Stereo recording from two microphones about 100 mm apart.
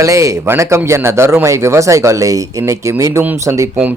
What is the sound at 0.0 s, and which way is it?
Speech, 30° right (ahead or behind).